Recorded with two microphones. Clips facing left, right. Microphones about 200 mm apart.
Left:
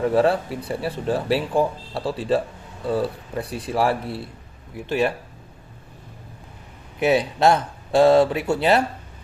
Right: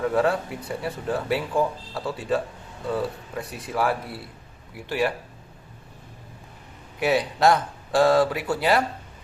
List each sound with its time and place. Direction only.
0.0 s speech: 30° left (ahead or behind)
7.0 s speech: 25° left (ahead or behind)